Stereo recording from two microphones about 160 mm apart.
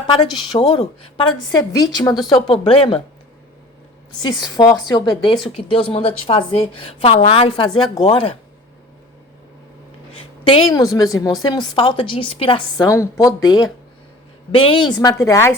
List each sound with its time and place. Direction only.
0.7 s a woman's voice: 30° left (ahead or behind)
2.3 s a woman's voice: 35° left (ahead or behind)
4.2 s a woman's voice: 25° left (ahead or behind)
10.2 s a sound: 35° left (ahead or behind)
10.7 s a woman's voice: 25° left (ahead or behind)
14.5 s a woman's voice: 35° left (ahead or behind)